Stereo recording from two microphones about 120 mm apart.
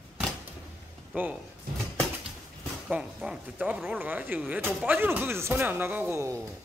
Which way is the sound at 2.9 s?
10° right (ahead or behind).